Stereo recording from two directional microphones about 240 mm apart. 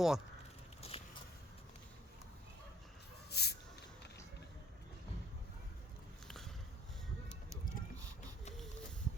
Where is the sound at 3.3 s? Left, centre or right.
Left.